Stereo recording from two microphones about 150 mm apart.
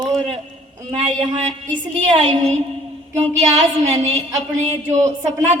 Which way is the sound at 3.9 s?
45° right (ahead or behind).